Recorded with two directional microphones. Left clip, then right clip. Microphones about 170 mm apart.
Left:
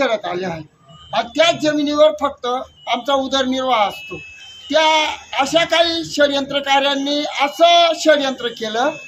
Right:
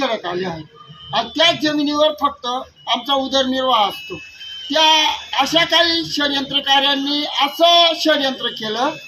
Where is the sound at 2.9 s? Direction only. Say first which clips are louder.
Even; 25° left (ahead or behind).